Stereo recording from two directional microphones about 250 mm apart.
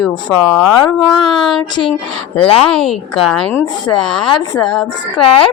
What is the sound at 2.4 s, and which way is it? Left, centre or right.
Speech, left.